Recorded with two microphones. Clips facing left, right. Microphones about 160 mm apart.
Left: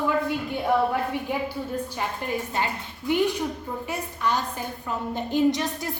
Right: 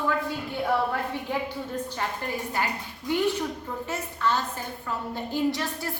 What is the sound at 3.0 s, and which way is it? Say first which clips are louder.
A woman's voice: left 2 dB; 15° left (ahead or behind).